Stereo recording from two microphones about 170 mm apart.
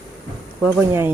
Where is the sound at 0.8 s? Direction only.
15° right (ahead or behind).